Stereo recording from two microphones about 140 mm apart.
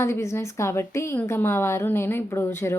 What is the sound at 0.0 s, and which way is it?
A woman's voice, 20° left (ahead or behind).